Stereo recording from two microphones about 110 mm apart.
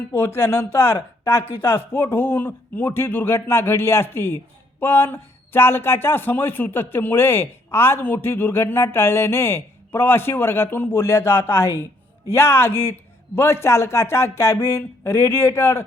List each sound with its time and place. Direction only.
0.1 s speech: 20° left (ahead or behind)